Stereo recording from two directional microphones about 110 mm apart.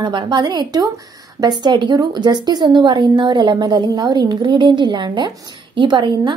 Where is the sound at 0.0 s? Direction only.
45° right (ahead or behind).